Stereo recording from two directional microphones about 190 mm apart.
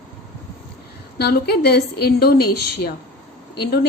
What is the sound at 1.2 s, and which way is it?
A woman's voice, 55° left (ahead or behind).